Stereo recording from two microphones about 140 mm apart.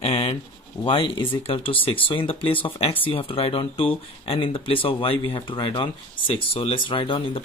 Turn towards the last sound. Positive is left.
turn(degrees=40)  # may be behind; listen again after turning